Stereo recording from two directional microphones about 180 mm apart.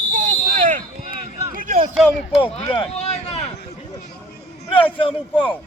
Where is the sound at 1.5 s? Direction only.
45° right (ahead or behind).